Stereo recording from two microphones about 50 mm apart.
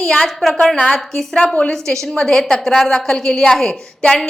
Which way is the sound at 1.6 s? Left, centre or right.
Centre.